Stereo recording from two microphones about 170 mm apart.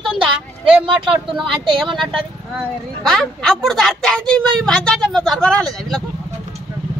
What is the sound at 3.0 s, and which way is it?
A woman's voice, 5° left (ahead or behind).